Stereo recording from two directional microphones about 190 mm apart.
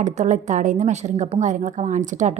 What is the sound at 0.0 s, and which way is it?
A woman's voice, 40° right (ahead or behind).